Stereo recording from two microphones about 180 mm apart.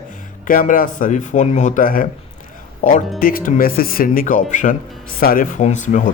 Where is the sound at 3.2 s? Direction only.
50° left (ahead or behind).